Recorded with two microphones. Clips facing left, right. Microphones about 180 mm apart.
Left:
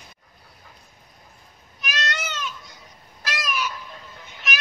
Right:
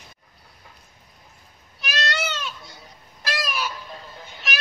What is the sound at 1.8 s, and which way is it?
Goat, 35° right (ahead or behind).